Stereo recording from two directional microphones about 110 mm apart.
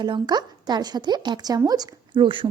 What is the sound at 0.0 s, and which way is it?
Speech, 40° right (ahead or behind).